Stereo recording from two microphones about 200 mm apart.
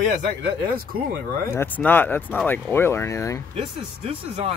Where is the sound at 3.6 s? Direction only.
25° right (ahead or behind).